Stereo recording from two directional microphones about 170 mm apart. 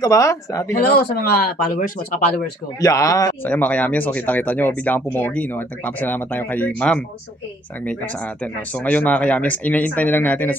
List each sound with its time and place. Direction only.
0.0 s speech: 20° left (ahead or behind)
1.2 s speech: 60° left (ahead or behind)
2.8 s speech: 20° left (ahead or behind)
8.7 s speech: 10° left (ahead or behind)